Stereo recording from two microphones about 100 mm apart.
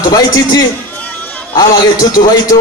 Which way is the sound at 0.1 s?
40° left (ahead or behind).